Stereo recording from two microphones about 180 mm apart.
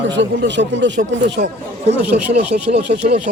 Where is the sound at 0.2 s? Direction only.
80° right.